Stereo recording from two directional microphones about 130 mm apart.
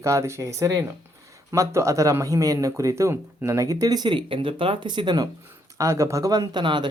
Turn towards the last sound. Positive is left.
turn(degrees=-35)  # may be behind; listen again after turning